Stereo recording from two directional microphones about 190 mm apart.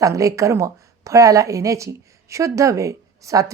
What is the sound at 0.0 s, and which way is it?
Speech, 15° right (ahead or behind).